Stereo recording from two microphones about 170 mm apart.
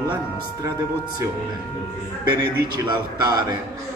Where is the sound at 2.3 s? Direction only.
20° right (ahead or behind).